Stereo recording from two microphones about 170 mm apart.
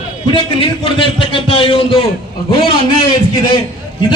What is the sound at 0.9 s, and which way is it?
A man's voice, 30° left (ahead or behind).